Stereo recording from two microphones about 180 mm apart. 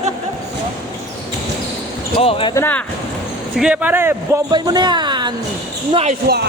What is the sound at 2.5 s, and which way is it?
Speech, 10° left (ahead or behind).